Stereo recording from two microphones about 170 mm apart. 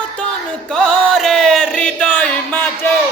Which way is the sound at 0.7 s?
Centre (ahead or behind).